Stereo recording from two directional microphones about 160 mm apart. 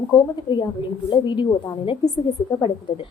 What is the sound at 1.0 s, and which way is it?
A woman's voice, 30° left (ahead or behind).